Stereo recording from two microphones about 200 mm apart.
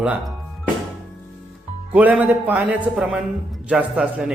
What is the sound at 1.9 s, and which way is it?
Speech, 10° right (ahead or behind).